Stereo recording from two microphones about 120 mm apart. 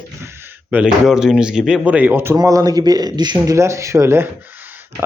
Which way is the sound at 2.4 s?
30° right (ahead or behind).